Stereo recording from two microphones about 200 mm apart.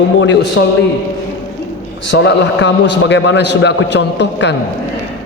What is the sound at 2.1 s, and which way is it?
A man's voice, 60° left (ahead or behind).